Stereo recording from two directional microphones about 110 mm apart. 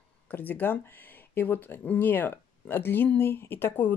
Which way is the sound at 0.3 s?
15° left (ahead or behind).